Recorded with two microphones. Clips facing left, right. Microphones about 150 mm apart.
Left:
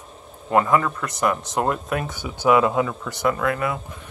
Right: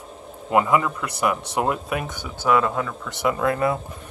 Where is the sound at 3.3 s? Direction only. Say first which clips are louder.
Right 1 dB; 25° right (ahead or behind).